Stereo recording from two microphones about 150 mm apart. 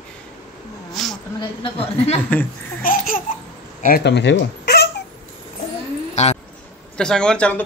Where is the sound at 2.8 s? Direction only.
70° left (ahead or behind).